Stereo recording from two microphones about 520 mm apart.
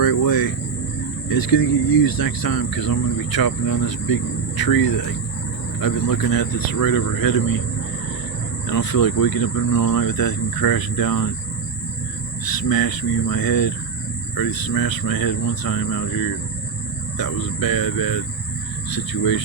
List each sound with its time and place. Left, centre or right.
0.0 s cricket: left
1.3 s speech: left
8.6 s speech: left
12.6 s speech: left